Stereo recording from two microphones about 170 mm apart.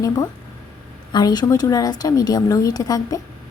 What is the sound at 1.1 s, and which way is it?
Speech, 25° left (ahead or behind).